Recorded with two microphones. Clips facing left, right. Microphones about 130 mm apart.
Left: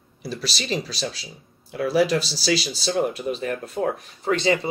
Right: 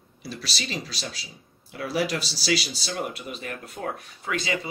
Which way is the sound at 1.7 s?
35° left (ahead or behind).